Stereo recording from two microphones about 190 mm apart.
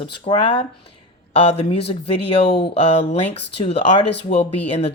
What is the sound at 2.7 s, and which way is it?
Speech, 35° left (ahead or behind).